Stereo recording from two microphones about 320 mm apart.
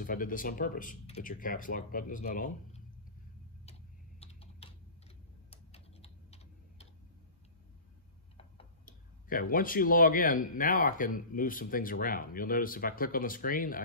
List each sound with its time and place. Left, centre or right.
0.0 s speech: left
4.2 s typing: centre
8.4 s speech: left